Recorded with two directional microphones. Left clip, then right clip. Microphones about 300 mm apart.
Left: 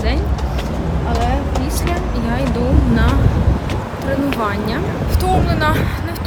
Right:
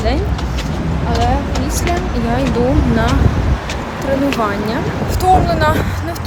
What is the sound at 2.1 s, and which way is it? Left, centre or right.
Speech, centre.